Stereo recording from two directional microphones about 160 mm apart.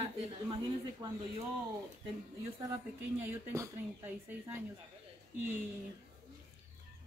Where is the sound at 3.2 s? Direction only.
15° right (ahead or behind).